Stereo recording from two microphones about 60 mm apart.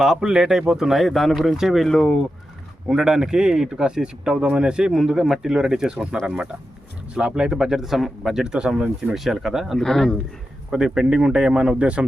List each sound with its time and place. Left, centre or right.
0.0 s speech: centre
2.9 s speech: centre
9.7 s speech: centre
10.7 s speech: centre